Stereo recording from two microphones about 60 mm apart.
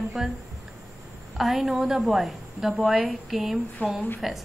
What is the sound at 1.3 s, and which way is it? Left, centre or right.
A woman's voice, centre.